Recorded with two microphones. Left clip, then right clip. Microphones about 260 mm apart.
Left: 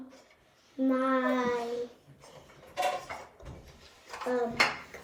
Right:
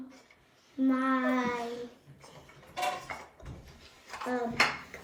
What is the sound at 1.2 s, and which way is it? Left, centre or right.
Speech, centre.